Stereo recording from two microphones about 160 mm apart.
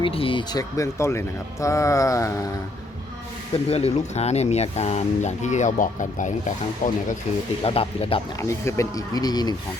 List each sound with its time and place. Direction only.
0.0 s speech: 35° left (ahead or behind)
0.8 s speech: 20° left (ahead or behind)
3.5 s speech: 40° left (ahead or behind); by 7.0 s 55° left (ahead or behind)
7.6 s speech: 35° left (ahead or behind)
8.4 s speech: 15° left (ahead or behind)